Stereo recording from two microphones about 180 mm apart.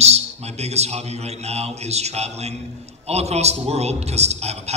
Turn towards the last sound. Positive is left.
turn(degrees=-35)  # may be behind; listen again after turning